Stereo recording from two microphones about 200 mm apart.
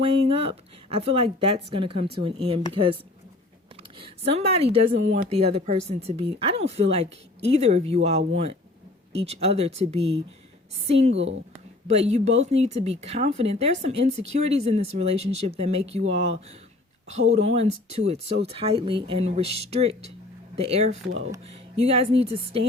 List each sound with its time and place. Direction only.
0.0 s speech: 30° right (ahead or behind)
17.1 s speech: 30° right (ahead or behind)